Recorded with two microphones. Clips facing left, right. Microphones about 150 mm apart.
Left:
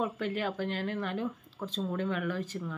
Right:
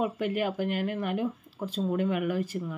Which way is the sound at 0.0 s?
10° right (ahead or behind).